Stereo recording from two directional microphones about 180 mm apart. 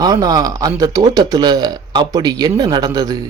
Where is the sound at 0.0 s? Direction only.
20° right (ahead or behind).